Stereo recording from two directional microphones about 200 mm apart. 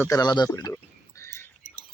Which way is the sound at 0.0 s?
20° left (ahead or behind).